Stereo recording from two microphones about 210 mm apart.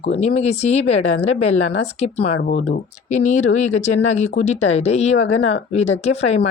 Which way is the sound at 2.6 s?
35° left (ahead or behind).